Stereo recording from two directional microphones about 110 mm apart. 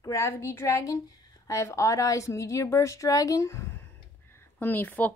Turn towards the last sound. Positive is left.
turn(degrees=15)  # may be behind; listen again after turning